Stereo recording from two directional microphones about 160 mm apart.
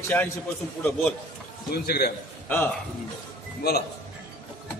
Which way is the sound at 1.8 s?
75° left (ahead or behind).